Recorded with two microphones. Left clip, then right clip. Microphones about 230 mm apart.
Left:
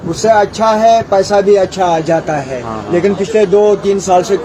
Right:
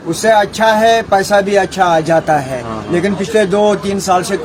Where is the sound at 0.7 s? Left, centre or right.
Right.